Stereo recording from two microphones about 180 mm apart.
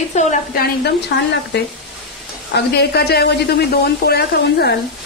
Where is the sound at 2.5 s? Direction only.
65° left (ahead or behind).